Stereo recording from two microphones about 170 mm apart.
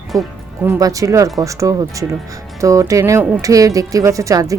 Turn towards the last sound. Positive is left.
turn(degrees=-20)  # may be behind; listen again after turning